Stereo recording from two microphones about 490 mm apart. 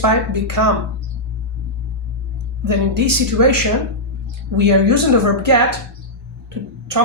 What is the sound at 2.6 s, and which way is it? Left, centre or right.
Speech, right.